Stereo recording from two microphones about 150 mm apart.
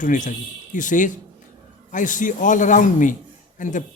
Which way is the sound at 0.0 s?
60° left (ahead or behind).